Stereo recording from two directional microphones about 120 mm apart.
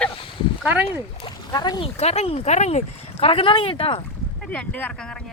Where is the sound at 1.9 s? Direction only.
60° left (ahead or behind).